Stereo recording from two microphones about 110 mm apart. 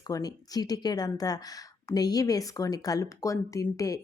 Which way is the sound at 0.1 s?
35° left (ahead or behind).